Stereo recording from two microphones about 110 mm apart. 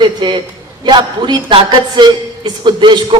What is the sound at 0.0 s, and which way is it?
A man's voice, 45° right (ahead or behind).